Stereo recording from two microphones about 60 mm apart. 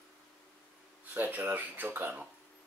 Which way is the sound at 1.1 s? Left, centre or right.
Right.